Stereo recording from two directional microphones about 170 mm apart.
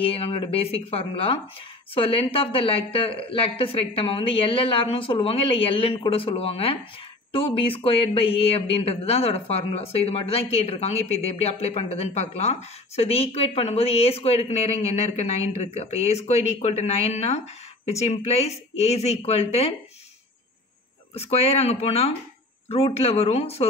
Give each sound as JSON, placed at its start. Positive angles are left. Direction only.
{"t": 0.0, "sound": "a woman's voice", "side_deg": 35}
{"t": 21.1, "sound": "a woman's voice", "side_deg": 35}